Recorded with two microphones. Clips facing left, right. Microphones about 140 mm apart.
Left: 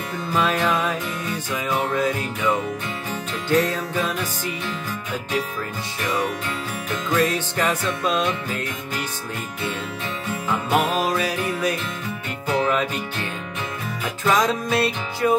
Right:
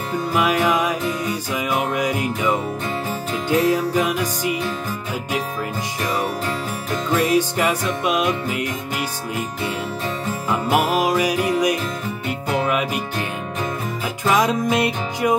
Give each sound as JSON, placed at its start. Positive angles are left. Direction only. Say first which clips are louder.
{"t": 0.3, "sound": "music", "louder": "right 2 dB", "side_deg": -10}
{"t": 7.2, "sound": "music", "louder": "right 3 dB", "side_deg": -10}
{"t": 10.7, "sound": "music", "louder": "right 3 dB", "side_deg": -10}
{"t": 14.2, "sound": "music", "louder": "right 2 dB", "side_deg": -15}